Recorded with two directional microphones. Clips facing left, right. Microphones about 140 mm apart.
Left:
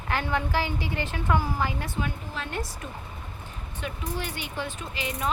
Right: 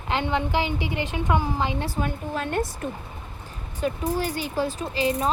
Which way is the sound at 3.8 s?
40° right (ahead or behind).